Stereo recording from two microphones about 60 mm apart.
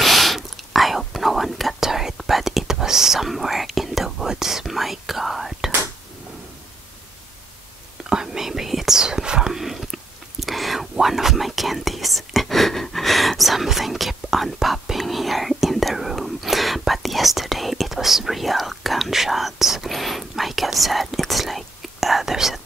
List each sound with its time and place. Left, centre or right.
0.0 s whispering: centre
8.1 s whispering: centre